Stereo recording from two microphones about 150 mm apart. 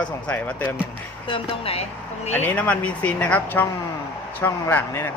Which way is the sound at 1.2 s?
35° left (ahead or behind).